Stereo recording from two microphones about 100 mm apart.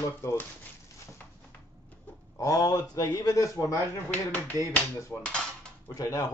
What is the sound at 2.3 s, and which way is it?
Speech, 35° left (ahead or behind).